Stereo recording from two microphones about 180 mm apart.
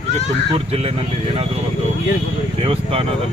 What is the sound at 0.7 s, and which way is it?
Speech, 35° right (ahead or behind).